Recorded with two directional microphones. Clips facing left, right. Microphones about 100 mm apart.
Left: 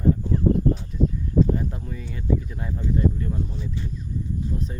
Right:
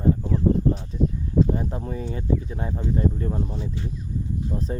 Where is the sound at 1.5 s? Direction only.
35° right (ahead or behind).